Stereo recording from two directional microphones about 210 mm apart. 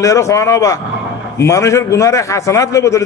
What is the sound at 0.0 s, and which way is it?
A man's voice, 15° left (ahead or behind).